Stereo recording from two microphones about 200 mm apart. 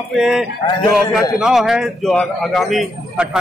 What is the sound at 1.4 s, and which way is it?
Speech, centre (ahead or behind).